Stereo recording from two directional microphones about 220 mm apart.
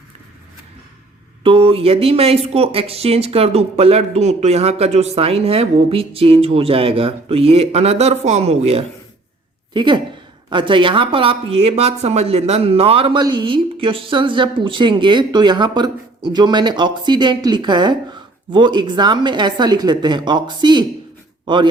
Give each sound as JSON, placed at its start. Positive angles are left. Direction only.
{"t": 1.5, "sound": "speech", "side_deg": -25}